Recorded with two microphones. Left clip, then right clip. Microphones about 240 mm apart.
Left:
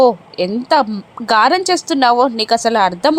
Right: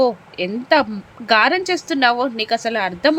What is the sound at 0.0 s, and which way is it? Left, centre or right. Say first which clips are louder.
A woman's voice: left 6 dB; centre.